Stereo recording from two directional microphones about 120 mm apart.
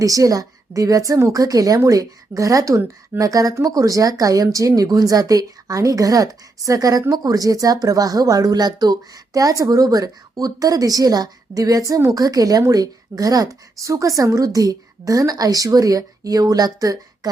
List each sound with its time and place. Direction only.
0.0 s a woman's voice: 30° right (ahead or behind)